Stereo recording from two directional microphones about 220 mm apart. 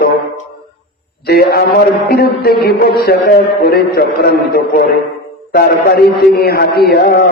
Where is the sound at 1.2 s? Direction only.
45° left (ahead or behind).